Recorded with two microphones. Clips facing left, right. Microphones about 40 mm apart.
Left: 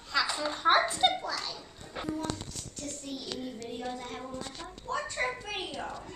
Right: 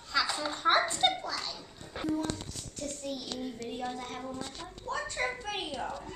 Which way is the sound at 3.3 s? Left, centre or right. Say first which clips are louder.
Even; centre.